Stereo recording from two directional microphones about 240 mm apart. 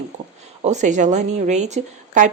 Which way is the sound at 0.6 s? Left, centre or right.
Right.